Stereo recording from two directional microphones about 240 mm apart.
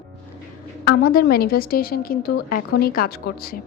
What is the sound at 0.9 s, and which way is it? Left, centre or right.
A woman's voice, left.